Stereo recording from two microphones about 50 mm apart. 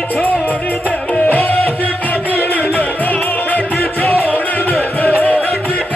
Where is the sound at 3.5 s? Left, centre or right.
Left.